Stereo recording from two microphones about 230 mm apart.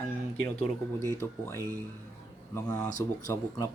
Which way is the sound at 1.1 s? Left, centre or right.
Centre.